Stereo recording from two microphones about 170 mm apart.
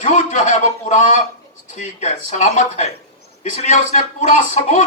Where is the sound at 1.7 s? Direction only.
45° left (ahead or behind).